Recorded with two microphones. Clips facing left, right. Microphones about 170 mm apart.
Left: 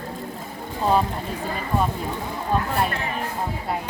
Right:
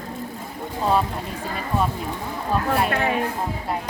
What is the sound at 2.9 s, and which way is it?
Speech, 65° right (ahead or behind).